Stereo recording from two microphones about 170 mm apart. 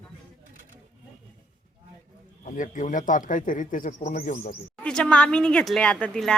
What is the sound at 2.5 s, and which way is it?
Speech, 50° left (ahead or behind).